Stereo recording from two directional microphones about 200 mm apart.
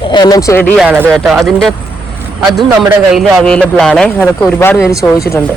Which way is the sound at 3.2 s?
5° left (ahead or behind).